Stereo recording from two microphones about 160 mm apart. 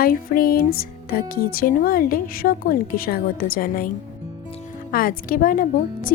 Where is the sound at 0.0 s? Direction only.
65° left (ahead or behind).